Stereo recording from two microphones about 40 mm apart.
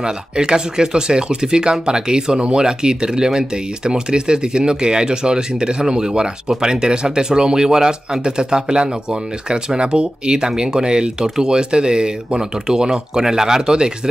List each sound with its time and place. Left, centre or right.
0.0 s speech: centre